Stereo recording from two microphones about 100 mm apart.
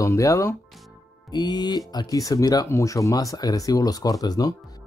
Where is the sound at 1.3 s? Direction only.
45° left (ahead or behind).